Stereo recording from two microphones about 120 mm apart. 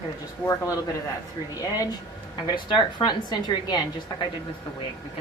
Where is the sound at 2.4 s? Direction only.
40° left (ahead or behind).